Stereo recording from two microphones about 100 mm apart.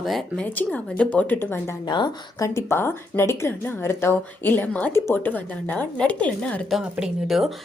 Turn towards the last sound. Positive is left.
turn(degrees=0)  # may be behind; listen again after turning